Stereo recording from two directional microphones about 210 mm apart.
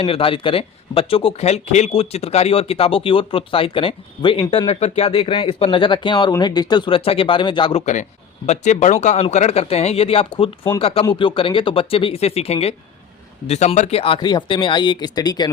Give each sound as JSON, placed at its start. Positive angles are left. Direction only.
{"t": 0.0, "sound": "speech", "side_deg": 25}